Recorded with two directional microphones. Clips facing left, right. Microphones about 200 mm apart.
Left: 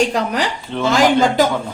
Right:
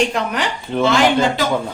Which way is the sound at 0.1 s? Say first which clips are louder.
Left 2 dB; 35° left (ahead or behind).